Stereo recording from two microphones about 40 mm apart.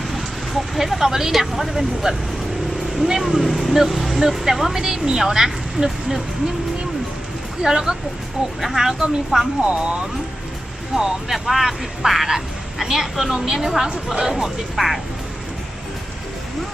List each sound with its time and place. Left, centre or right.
0.1 s a sound: centre
0.9 s a woman's voice: centre
7.6 s a woman's voice: centre
9.6 s a woman's voice: right
11.3 s a woman's voice: centre
14.8 s speech: centre